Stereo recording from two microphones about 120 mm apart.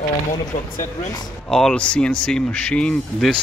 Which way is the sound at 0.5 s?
90° left.